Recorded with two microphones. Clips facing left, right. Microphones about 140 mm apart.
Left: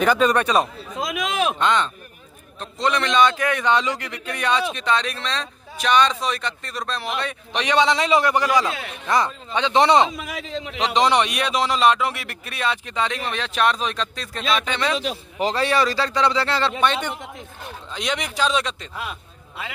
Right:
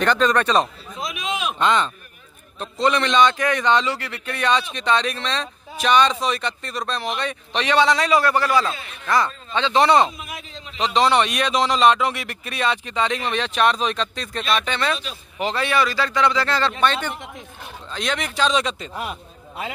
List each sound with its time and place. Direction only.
0.0 s speech: 5° left (ahead or behind)
0.9 s a sound: 90° left
1.6 s speech: centre (ahead or behind); by 10.0 s 20° left (ahead or behind)
10.1 s a man's voice: 90° left
10.9 s speech: 15° left (ahead or behind)
14.7 s speech: 15° left (ahead or behind)
15.3 s speech: 35° left (ahead or behind); by 18.9 s 5° right (ahead or behind)